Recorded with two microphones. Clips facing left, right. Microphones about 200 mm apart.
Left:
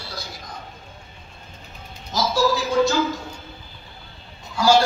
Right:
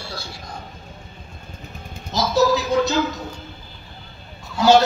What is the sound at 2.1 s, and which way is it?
Speech, 20° right (ahead or behind).